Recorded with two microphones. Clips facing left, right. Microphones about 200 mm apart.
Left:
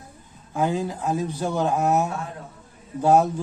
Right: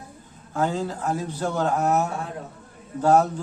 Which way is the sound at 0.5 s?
15° left (ahead or behind).